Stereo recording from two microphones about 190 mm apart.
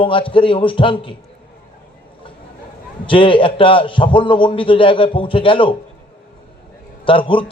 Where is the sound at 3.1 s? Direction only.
25° left (ahead or behind).